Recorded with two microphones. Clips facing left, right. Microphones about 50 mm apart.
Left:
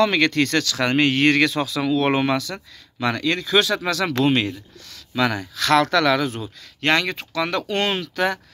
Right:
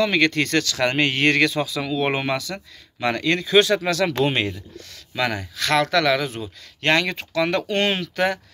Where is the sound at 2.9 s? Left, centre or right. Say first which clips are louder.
Even; right.